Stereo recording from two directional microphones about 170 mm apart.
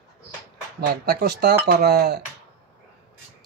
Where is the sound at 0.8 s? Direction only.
60° right (ahead or behind).